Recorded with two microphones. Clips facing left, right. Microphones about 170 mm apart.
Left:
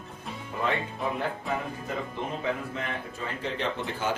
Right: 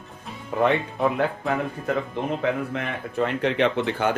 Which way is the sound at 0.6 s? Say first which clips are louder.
Right 8 dB; 65° right (ahead or behind).